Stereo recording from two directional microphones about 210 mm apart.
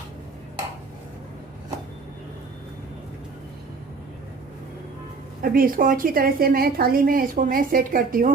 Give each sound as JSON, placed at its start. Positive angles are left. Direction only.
{"t": 5.4, "sound": "a woman's voice", "side_deg": -45}